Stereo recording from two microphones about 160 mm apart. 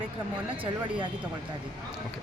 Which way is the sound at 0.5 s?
30° right (ahead or behind).